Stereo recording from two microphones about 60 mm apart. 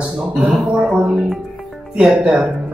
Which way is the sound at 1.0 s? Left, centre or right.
Centre.